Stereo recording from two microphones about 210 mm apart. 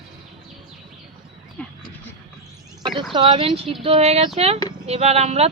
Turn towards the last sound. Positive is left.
turn(degrees=-30)  # may be behind; listen again after turning